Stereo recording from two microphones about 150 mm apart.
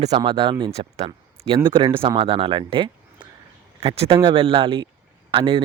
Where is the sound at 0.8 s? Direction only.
45° right (ahead or behind).